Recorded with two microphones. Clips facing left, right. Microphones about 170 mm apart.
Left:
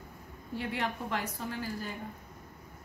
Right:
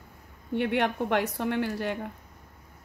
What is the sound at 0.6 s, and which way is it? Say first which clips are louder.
A woman's voice: right 9 dB; 65° right (ahead or behind).